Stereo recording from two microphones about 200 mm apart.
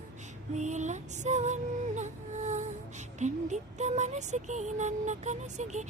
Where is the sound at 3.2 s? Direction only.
35° right (ahead or behind).